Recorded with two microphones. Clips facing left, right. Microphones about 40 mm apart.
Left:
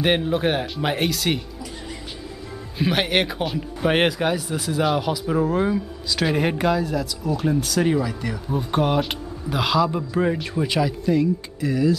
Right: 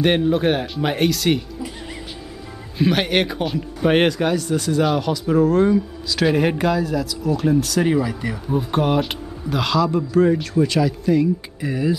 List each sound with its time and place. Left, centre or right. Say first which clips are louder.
0.0 s speech: right 3 dB; centre
2.8 s speech: right 3 dB; centre
11.6 s speech: left 2 dB; centre